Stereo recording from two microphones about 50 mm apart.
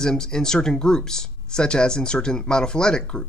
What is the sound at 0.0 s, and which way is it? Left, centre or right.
Speech, centre.